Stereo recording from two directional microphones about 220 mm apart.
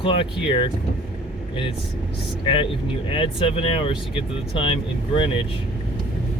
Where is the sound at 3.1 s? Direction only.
25° left (ahead or behind).